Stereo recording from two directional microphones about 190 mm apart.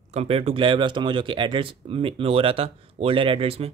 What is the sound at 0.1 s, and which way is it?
Speech, 35° right (ahead or behind).